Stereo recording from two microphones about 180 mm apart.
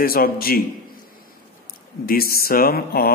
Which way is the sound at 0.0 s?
55° left (ahead or behind).